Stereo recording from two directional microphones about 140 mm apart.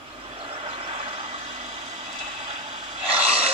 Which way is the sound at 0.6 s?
45° right (ahead or behind).